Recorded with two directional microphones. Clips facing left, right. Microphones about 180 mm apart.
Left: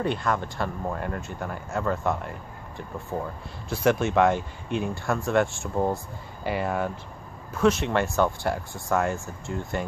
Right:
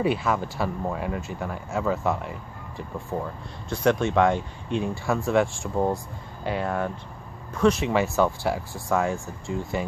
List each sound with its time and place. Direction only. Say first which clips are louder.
0.0 s speech: right 2 dB; 5° right (ahead or behind)
3.6 s speech: right 1 dB; 5° left (ahead or behind)